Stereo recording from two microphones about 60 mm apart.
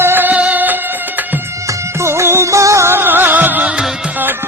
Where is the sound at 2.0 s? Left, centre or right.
Right.